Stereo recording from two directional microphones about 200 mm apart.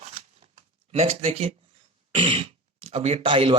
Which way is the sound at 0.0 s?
30° right (ahead or behind).